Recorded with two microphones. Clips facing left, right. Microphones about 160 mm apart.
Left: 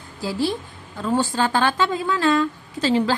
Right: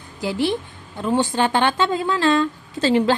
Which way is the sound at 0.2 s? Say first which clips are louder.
Right 2 dB; 20° right (ahead or behind).